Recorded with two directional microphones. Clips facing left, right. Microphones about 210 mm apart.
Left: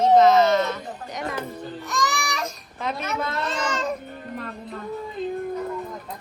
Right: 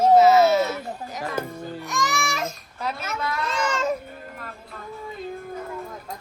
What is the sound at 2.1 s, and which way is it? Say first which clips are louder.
Babbling: right 2 dB; 25° right (ahead or behind).